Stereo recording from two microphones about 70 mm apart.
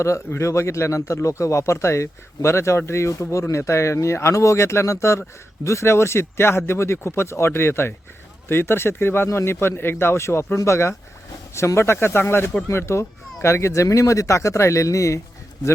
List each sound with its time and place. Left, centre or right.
0.0 s speech: left